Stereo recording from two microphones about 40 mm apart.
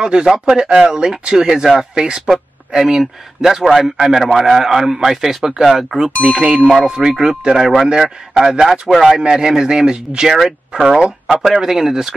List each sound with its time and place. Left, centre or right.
0.0 s a man's voice: centre
6.3 s a man's voice: centre
9.1 s a man's voice: centre
10.2 s speech: centre
10.7 s a man's voice: centre
11.3 s a man's voice: centre